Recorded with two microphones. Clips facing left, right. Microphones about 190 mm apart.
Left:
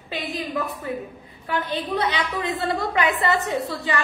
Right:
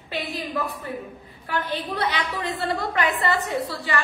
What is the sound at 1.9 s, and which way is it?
A woman's voice, 20° left (ahead or behind).